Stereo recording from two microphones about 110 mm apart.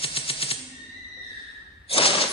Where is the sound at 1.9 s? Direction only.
55° left (ahead or behind).